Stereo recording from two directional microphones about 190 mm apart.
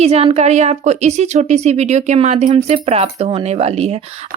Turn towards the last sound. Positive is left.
turn(degrees=-35)  # may be behind; listen again after turning